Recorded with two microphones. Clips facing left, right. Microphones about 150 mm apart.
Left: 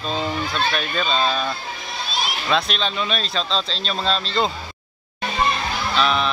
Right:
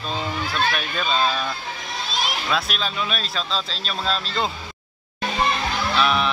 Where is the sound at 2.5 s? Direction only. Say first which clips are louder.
Left 6 dB; 5° right (ahead or behind).